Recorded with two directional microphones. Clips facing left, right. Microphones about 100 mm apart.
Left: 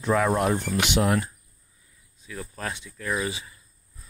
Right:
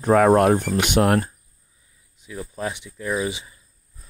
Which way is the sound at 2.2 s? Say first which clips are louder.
Right 5 dB; 20° right (ahead or behind).